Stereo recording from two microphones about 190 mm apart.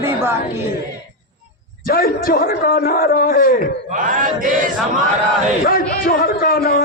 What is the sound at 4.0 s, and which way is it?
Chant, 45° right (ahead or behind).